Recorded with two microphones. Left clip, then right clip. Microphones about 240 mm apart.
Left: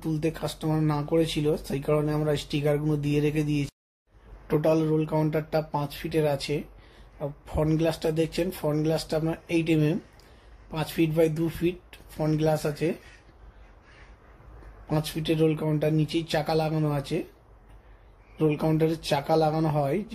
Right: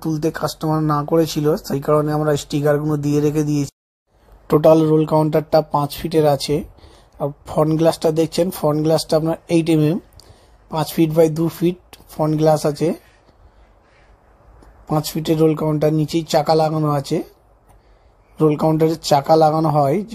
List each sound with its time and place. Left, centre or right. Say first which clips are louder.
0.0 s speech: right 8 dB; right
14.9 s speech: right 8 dB; right
18.4 s speech: right 9 dB; right